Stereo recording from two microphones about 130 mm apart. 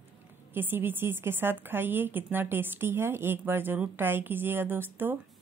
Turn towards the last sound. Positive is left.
turn(degrees=-15)  # may be behind; listen again after turning